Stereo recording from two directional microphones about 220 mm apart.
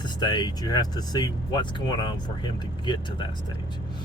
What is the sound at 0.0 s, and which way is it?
Speech, 20° left (ahead or behind).